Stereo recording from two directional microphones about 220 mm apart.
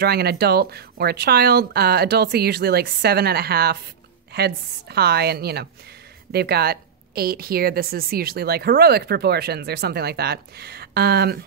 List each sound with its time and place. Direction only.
0.0 s a woman's voice: 45° right (ahead or behind)